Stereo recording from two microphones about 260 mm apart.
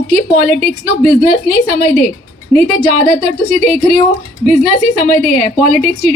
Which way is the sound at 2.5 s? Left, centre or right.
Centre.